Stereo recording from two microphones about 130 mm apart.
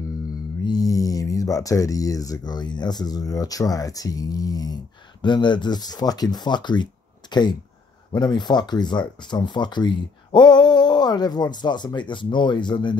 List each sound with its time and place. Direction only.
0.7 s speech: 30° left (ahead or behind)